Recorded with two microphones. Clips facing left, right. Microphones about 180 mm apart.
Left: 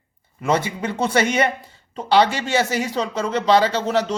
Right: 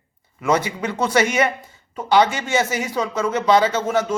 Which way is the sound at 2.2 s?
65° left (ahead or behind).